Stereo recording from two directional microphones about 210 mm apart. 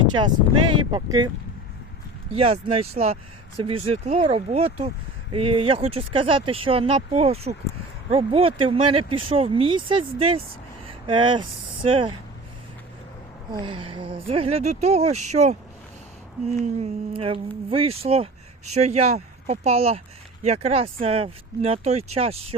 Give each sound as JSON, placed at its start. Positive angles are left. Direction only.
{"t": 0.7, "sound": "speech", "side_deg": -20}
{"t": 2.3, "sound": "speech", "side_deg": -30}
{"t": 13.5, "sound": "speech", "side_deg": -25}